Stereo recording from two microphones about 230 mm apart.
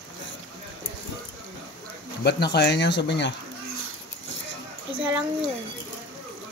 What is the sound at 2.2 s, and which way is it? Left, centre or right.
Speech, left.